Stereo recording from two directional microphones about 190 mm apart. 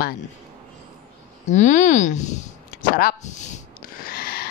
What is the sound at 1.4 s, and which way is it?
Speech, 40° left (ahead or behind).